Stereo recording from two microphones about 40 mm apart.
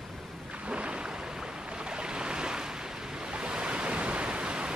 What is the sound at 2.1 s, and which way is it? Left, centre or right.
Waves, right.